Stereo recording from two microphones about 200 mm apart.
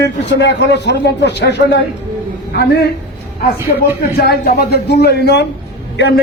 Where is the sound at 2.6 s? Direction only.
55° left (ahead or behind).